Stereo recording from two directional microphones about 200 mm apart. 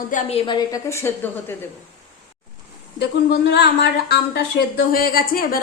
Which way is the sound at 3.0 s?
60° left (ahead or behind).